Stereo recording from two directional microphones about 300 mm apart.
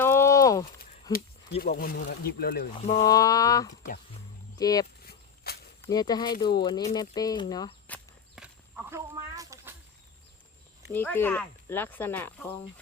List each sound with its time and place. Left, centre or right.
0.0 s a sound: centre
1.1 s speech: left
3.1 s speech: centre
3.7 s speech: left
4.5 s speech: centre
5.0 s a sound: left
5.8 s speech: centre
8.9 s a sound: centre
10.8 s speech: centre